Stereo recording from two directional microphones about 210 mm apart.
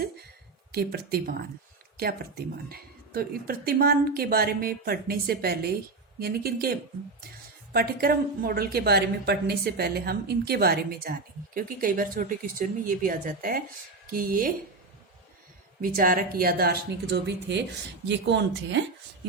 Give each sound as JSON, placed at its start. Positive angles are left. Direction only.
{"t": 0.7, "sound": "a woman's voice", "side_deg": -50}
{"t": 2.6, "sound": "a woman's voice", "side_deg": -45}
{"t": 15.8, "sound": "speech", "side_deg": -40}